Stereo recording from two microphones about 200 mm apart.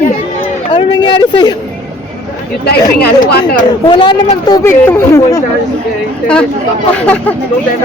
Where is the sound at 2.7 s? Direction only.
55° left (ahead or behind).